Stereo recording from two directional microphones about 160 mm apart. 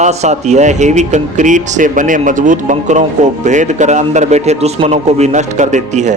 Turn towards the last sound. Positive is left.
turn(degrees=-50)  # may be behind; listen again after turning